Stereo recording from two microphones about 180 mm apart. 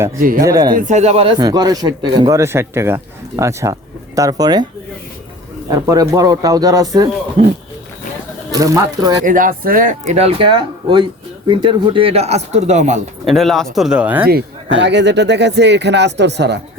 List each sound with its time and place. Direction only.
0.2 s speech: 50° right (ahead or behind)
0.4 s speech: 20° right (ahead or behind)
0.7 s speech: 45° right (ahead or behind); by 4.6 s 20° right (ahead or behind)
5.6 s speech: 20° right (ahead or behind)
7.4 s speech: 30° right (ahead or behind)
8.5 s speech: 20° right (ahead or behind)
9.2 s speech: 50° right (ahead or behind)
13.2 s speech: centre (ahead or behind)
14.3 s speech: 70° right (ahead or behind)